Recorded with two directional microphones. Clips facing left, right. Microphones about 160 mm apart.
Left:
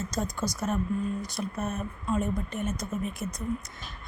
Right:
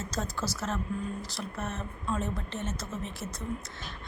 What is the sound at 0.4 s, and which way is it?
Speech, 10° left (ahead or behind).